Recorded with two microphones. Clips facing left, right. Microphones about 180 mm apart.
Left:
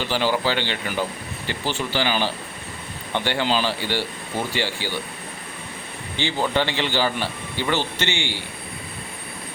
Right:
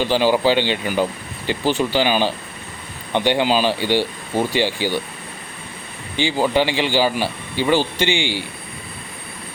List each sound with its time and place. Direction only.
0.0 s speech: 15° right (ahead or behind)
6.1 s speech: 10° right (ahead or behind)